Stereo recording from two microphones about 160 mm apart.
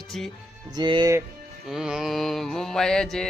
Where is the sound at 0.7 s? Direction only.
30° right (ahead or behind).